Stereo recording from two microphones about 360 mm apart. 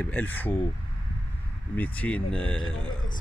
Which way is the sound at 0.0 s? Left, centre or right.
Centre.